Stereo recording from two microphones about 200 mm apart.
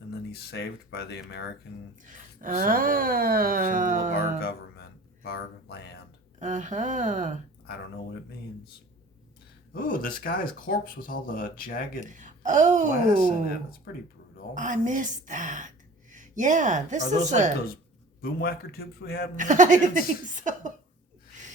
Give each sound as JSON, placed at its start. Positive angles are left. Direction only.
{"t": 0.3, "sound": "speech", "side_deg": 55}
{"t": 2.0, "sound": "speech", "side_deg": -40}
{"t": 4.4, "sound": "speech", "side_deg": 50}
{"t": 6.4, "sound": "speech", "side_deg": -40}
{"t": 9.7, "sound": "speech", "side_deg": 45}
{"t": 11.9, "sound": "speech", "side_deg": -40}
{"t": 14.5, "sound": "speech", "side_deg": -40}
{"t": 18.2, "sound": "speech", "side_deg": 50}
{"t": 19.4, "sound": "speech", "side_deg": -40}